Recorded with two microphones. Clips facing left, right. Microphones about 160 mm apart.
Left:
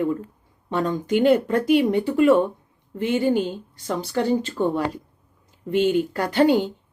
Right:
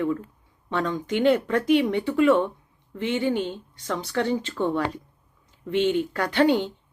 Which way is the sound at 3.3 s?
5° left (ahead or behind).